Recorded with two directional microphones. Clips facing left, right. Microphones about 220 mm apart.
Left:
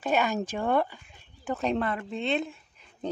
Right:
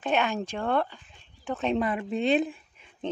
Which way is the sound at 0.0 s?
5° left (ahead or behind).